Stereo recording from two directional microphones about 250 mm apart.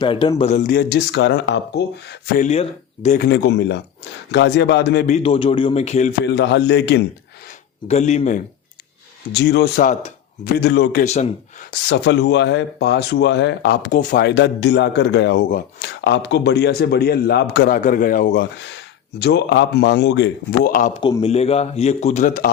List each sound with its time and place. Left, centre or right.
0.0 s speech: centre; by 1.8 s left
2.2 s a man's voice: left
6.2 s speech: left
7.9 s a man's voice: left
9.3 s speech: left
10.6 s speech: left
11.0 s a man's voice: left
11.7 s speech: left
21.0 s a man's voice: left